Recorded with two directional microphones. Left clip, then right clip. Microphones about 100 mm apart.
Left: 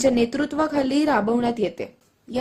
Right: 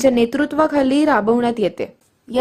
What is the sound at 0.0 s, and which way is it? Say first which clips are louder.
A woman's voice: right 5 dB; 35° right (ahead or behind).